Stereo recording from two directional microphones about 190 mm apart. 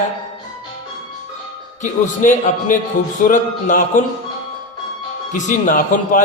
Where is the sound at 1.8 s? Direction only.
40° left (ahead or behind).